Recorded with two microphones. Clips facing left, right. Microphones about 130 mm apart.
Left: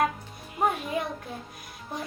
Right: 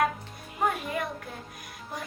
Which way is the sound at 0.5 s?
Centre (ahead or behind).